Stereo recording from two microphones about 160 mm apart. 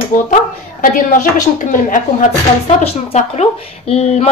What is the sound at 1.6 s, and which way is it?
Speech, 55° left (ahead or behind).